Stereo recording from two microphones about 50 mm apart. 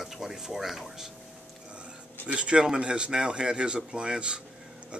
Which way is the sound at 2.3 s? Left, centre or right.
Right.